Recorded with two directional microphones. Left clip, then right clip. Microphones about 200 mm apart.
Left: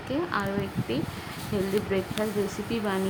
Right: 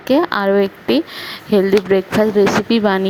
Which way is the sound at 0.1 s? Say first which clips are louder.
Right 15 dB; 45° right (ahead or behind).